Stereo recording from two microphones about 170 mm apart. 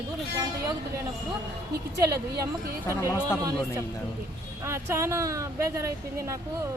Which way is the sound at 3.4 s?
20° right (ahead or behind).